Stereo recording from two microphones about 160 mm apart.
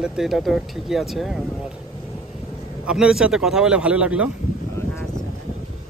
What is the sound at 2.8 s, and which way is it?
Speech, 5° right (ahead or behind).